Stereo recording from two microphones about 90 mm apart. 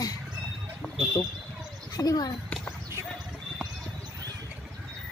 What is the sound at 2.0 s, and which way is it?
Speech, 45° left (ahead or behind).